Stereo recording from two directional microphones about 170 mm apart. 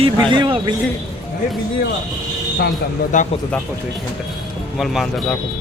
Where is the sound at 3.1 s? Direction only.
45° left (ahead or behind).